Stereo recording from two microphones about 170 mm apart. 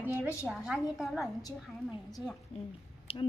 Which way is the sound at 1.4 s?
20° left (ahead or behind).